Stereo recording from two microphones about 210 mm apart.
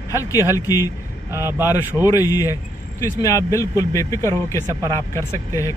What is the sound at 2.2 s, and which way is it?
A man's voice, 15° left (ahead or behind).